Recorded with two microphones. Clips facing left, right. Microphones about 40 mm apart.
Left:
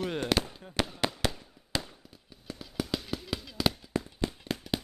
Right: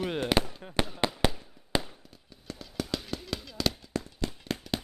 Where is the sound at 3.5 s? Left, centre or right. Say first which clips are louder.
Left 2 dB; centre.